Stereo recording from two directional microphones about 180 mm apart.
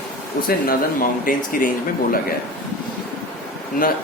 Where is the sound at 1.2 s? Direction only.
50° left (ahead or behind).